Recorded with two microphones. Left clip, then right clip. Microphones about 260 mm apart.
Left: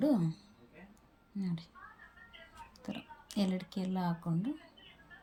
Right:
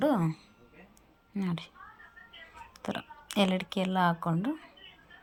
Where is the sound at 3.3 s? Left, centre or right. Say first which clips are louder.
Right 9 dB; centre.